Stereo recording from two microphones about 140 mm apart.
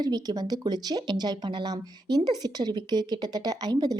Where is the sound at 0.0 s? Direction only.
30° right (ahead or behind).